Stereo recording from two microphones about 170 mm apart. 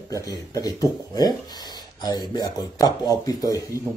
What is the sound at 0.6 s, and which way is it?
Speech, 20° left (ahead or behind).